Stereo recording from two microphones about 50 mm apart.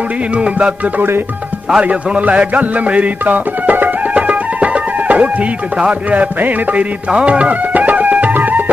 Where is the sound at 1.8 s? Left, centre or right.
Right.